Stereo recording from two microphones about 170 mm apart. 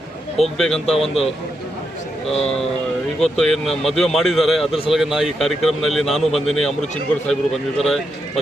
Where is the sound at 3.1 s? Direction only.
5° left (ahead or behind).